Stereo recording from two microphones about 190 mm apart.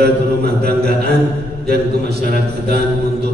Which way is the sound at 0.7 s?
60° right (ahead or behind).